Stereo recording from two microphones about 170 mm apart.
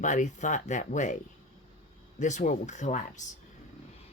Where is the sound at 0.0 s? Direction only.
45° left (ahead or behind).